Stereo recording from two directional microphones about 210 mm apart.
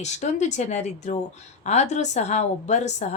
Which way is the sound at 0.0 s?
35° left (ahead or behind).